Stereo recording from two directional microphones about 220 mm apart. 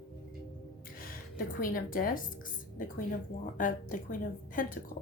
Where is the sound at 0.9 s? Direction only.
40° left (ahead or behind).